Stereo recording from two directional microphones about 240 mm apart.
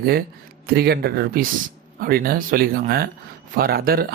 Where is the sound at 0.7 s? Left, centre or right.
Right.